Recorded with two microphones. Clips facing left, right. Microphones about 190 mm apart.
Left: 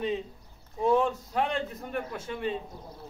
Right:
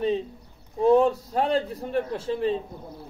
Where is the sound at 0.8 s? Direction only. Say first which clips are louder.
Right 6 dB; 35° right (ahead or behind).